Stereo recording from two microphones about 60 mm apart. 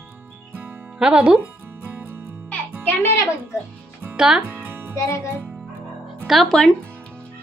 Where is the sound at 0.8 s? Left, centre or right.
Centre.